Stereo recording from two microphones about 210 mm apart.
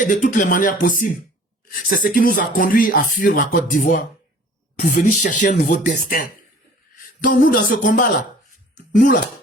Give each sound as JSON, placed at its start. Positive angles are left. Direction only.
{"t": 0.1, "sound": "speech", "side_deg": 40}